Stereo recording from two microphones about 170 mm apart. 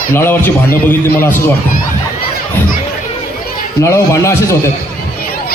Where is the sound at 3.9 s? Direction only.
15° left (ahead or behind).